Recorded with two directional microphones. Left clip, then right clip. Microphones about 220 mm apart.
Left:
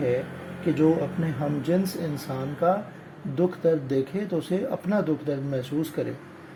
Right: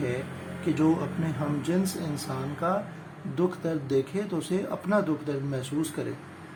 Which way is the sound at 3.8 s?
15° left (ahead or behind).